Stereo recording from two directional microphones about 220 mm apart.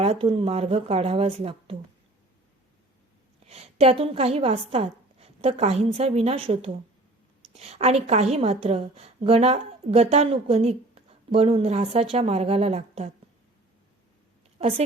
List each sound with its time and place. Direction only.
0.0 s a woman's voice: 25° right (ahead or behind)
3.4 s a woman's voice: 30° right (ahead or behind)